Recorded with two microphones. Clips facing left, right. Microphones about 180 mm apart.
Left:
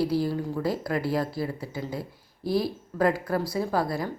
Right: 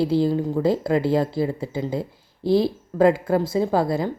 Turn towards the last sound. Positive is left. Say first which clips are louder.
# right 6 dB
turn(degrees=-25)  # may be behind; listen again after turning